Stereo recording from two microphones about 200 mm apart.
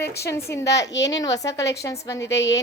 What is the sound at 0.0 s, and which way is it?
Speech, 55° left (ahead or behind).